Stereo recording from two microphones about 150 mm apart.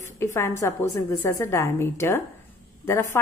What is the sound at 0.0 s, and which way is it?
A woman's voice, 15° left (ahead or behind).